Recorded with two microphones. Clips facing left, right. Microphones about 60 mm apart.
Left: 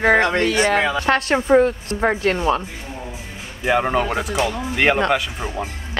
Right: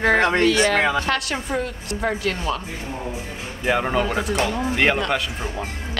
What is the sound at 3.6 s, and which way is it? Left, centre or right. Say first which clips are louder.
A man's voice: left 2 dB; centre.